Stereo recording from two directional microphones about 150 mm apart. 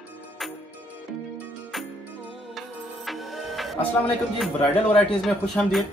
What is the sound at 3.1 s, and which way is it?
Music, centre (ahead or behind).